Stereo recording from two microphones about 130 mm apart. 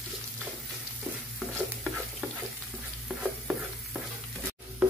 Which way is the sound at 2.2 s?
5° right (ahead or behind).